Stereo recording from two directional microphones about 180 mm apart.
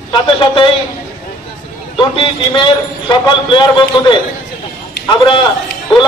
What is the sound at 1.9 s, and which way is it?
A man's voice, 30° left (ahead or behind).